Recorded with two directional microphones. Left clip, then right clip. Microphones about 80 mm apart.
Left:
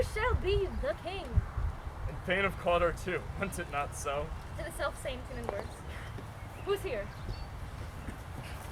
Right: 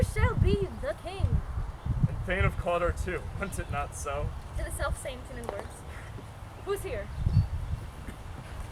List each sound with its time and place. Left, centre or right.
0.0 s a sound: centre
2.2 s speech: centre
4.6 s a woman's voice: centre
5.5 s speech: right
6.7 s a woman's voice: centre